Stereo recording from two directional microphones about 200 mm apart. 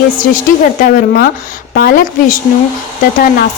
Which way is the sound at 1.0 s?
45° left (ahead or behind).